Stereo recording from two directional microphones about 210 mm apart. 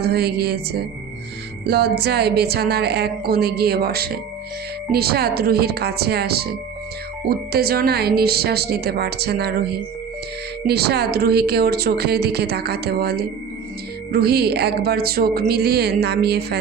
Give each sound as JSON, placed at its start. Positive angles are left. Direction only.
{"t": 0.0, "sound": "a woman's voice", "side_deg": -50}